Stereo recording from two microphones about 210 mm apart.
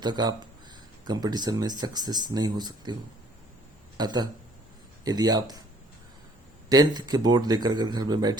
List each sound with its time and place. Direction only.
0.0 s speech: 20° right (ahead or behind)
6.7 s speech: 20° right (ahead or behind)